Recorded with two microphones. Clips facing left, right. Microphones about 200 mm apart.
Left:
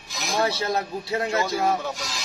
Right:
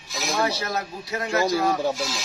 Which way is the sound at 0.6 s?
30° left (ahead or behind).